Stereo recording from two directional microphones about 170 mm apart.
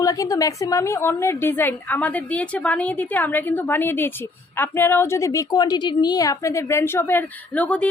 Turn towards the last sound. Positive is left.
turn(degrees=10)  # may be behind; listen again after turning